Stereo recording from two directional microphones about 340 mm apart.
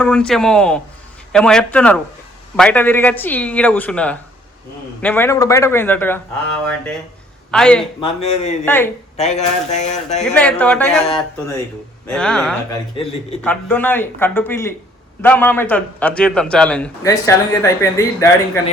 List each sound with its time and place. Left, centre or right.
0.0 s a man's voice: centre
8.4 s speech: centre
8.6 s a man's voice: centre
9.1 s speech: centre
10.2 s a man's voice: centre